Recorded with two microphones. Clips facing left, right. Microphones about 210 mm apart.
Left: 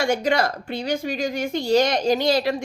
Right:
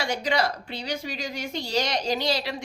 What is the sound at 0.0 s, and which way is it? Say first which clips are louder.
A woman's voice: left 5 dB; 50° left (ahead or behind).